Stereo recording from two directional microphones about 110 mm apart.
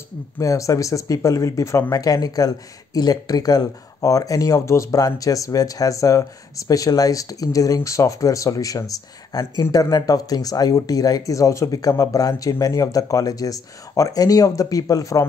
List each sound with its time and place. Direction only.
0.4 s speech: 30° left (ahead or behind)